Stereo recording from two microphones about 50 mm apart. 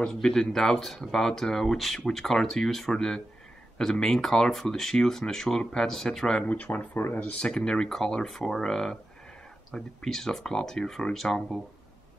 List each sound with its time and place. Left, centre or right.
0.0 s speech: centre
6.5 s speech: left; by 11.6 s centre